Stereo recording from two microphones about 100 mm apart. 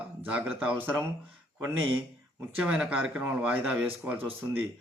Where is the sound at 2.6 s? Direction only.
15° right (ahead or behind).